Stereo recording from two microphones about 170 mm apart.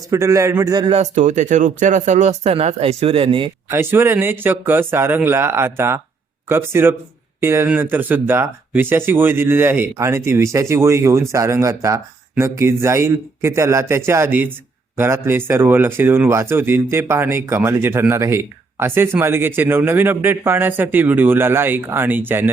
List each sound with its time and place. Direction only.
0.1 s speech: 20° right (ahead or behind)
1.1 s speech: 45° right (ahead or behind)
3.7 s speech: 15° right (ahead or behind)